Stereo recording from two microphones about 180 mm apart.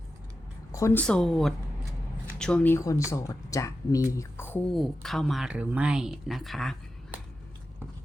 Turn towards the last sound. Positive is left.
turn(degrees=0)  # may be behind; listen again after turning